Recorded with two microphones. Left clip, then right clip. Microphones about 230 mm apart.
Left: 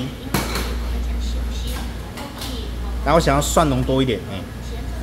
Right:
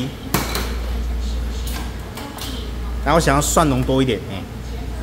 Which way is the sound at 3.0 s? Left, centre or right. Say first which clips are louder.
Even; centre.